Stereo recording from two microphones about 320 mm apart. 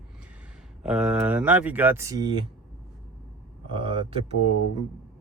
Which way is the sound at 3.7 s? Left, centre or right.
Centre.